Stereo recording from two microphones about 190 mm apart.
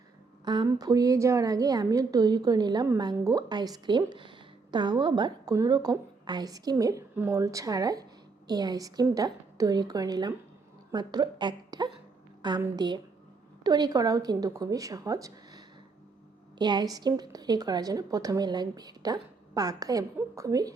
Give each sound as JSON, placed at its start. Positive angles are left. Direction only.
{"t": 0.4, "sound": "a woman's voice", "side_deg": -20}